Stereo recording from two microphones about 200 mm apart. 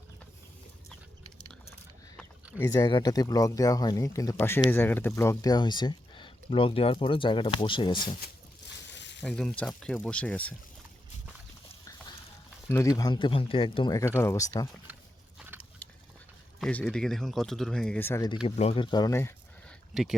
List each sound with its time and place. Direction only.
2.1 s speech: 10° left (ahead or behind)
8.9 s a sound: 60° left (ahead or behind)
9.2 s speech: 5° left (ahead or behind)
12.6 s speech: 15° left (ahead or behind)
14.9 s a sound: 10° right (ahead or behind)
16.6 s speech: 5° left (ahead or behind)
18.4 s speech: 30° left (ahead or behind); by 19.7 s 15° left (ahead or behind)
19.9 s speech: centre (ahead or behind)